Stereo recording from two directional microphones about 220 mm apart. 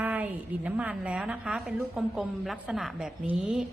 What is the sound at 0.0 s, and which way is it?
A woman's voice, 5° right (ahead or behind).